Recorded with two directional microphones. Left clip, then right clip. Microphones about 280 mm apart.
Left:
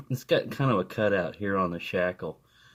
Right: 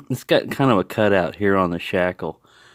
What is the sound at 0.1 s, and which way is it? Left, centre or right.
Speech, right.